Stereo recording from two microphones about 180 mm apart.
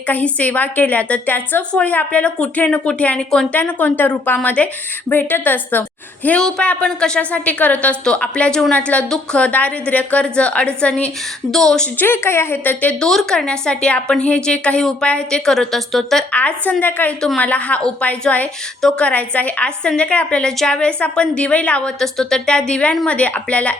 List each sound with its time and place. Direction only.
0.1 s a woman's voice: 10° left (ahead or behind)